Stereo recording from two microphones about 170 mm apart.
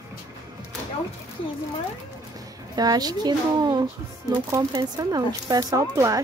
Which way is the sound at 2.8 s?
25° right (ahead or behind).